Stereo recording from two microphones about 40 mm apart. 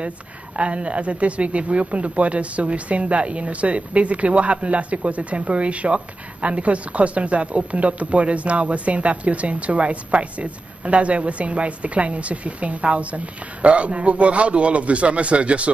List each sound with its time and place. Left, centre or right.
0.6 s speech: right